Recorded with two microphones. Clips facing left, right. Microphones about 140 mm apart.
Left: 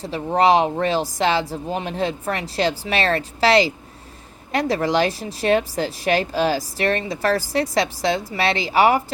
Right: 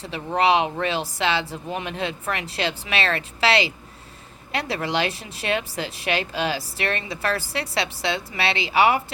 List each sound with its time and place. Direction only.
0.0 s speech: 40° left (ahead or behind)